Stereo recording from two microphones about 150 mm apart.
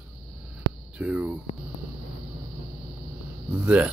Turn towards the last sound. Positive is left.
turn(degrees=-10)  # may be behind; listen again after turning